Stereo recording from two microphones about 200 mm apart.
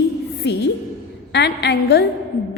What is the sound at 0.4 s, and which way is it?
A woman's voice, 60° left (ahead or behind).